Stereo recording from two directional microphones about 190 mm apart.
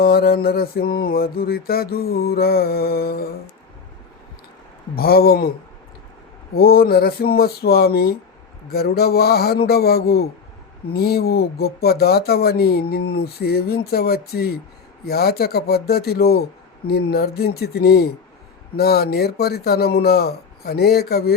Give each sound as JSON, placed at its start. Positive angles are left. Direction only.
{"t": 0.0, "sound": "mantra", "side_deg": 55}
{"t": 4.9, "sound": "mantra", "side_deg": 55}
{"t": 8.7, "sound": "speech", "side_deg": 55}